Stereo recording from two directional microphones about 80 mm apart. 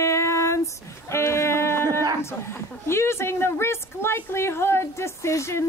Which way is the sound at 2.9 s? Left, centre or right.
Left.